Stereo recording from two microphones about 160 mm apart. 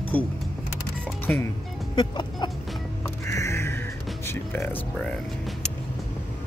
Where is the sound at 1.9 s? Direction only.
30° left (ahead or behind).